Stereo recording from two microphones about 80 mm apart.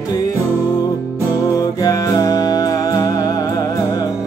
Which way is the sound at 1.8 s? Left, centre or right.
Left.